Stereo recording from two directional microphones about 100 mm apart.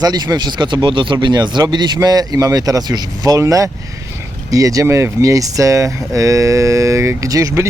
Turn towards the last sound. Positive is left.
turn(degrees=-35)  # may be behind; listen again after turning